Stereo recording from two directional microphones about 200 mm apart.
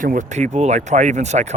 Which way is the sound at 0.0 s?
40° right (ahead or behind).